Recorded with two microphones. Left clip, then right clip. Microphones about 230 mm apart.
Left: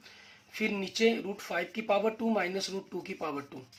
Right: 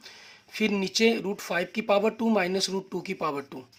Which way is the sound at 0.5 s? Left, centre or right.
Right.